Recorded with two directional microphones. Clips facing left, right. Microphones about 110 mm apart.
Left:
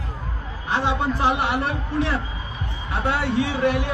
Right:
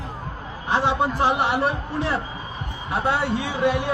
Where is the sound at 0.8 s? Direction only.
25° right (ahead or behind).